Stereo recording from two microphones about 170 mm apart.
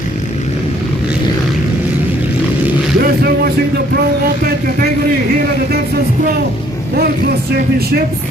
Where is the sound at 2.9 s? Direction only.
60° right (ahead or behind).